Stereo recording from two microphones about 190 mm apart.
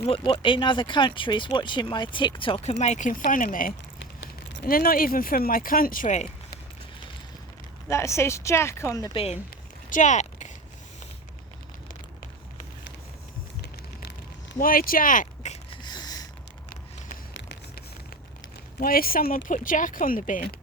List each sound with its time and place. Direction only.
0.0 s speech: 30° left (ahead or behind)
7.9 s speech: 15° left (ahead or behind)
9.1 s speech: 30° left (ahead or behind)
9.9 s a sound: 40° left (ahead or behind)
14.6 s speech: 50° left (ahead or behind)
15.7 s a sound: 20° left (ahead or behind)
18.8 s speech: 50° left (ahead or behind)